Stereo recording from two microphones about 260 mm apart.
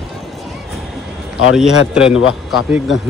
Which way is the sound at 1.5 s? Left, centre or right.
Centre.